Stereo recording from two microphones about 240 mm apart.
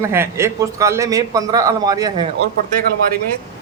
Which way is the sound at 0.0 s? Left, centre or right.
Centre.